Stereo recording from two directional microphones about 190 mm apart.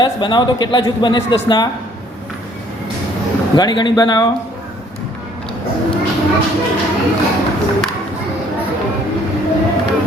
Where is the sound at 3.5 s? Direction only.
25° left (ahead or behind).